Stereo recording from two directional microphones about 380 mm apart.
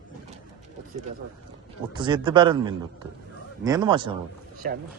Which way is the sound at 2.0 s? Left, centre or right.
Centre.